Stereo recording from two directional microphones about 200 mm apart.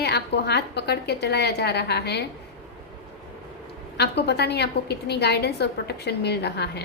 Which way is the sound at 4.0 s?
55° left (ahead or behind).